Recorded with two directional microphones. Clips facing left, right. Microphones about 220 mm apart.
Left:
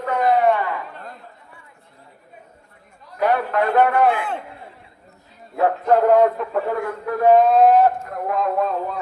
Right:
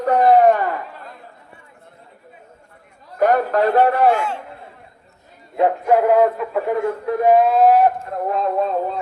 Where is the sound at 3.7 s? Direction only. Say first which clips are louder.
Even; 35° right (ahead or behind).